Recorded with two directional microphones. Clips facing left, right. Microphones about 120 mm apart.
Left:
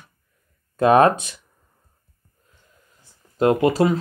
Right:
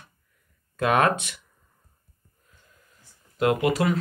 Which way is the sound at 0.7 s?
30° left (ahead or behind).